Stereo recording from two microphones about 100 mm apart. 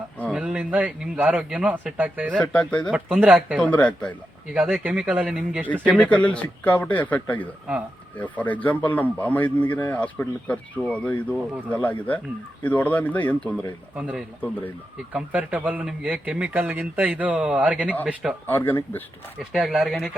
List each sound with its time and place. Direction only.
0.3 s speech: 10° right (ahead or behind)
2.4 s speech: 10° left (ahead or behind)
2.9 s speech: 15° right (ahead or behind)
3.6 s speech: 15° left (ahead or behind)
4.8 s speech: 15° right (ahead or behind)
5.6 s speech: 15° left (ahead or behind)
13.9 s speech: 10° right (ahead or behind)
14.4 s speech: 20° left (ahead or behind)
15.1 s speech: 15° right (ahead or behind)
18.4 s speech: 20° left (ahead or behind)
19.4 s speech: 5° right (ahead or behind)